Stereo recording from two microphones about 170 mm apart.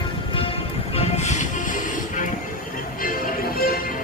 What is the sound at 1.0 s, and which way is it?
Music, 40° left (ahead or behind).